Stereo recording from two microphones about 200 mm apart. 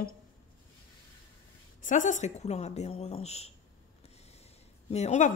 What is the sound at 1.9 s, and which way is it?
A woman's voice, 40° left (ahead or behind).